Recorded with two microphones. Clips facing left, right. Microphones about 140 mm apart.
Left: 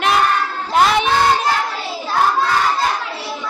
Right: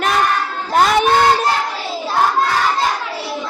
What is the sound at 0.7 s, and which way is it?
Speech, 45° right (ahead or behind).